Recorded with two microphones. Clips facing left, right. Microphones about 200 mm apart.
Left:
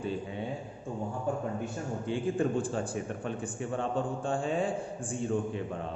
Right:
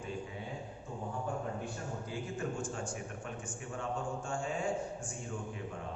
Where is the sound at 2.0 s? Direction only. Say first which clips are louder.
Left 11 dB; 30° left (ahead or behind).